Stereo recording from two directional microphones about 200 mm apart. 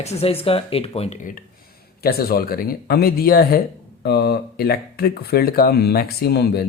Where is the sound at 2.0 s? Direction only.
50° left (ahead or behind).